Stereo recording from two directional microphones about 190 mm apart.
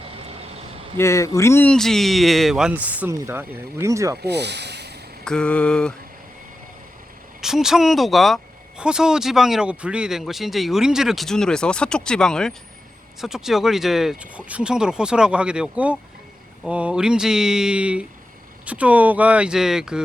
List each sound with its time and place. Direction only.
0.9 s speech: 15° left (ahead or behind); by 4.2 s 15° right (ahead or behind)
4.2 s speech: 60° right (ahead or behind)
5.2 s speech: 5° left (ahead or behind)
7.4 s speech: centre (ahead or behind)